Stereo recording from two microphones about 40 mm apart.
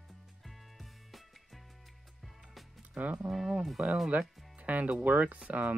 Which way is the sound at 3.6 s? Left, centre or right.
Centre.